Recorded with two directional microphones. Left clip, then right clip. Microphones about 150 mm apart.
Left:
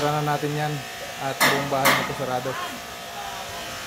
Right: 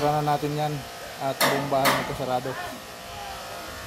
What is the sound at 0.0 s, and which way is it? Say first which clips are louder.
Speech: even; 5° left (ahead or behind).